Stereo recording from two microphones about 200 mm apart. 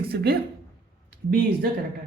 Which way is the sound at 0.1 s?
50° right (ahead or behind).